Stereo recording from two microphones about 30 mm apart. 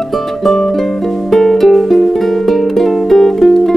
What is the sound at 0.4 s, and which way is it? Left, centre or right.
Music, centre.